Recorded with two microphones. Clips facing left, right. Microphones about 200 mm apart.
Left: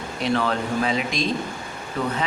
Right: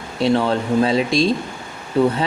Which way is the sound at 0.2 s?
30° right (ahead or behind).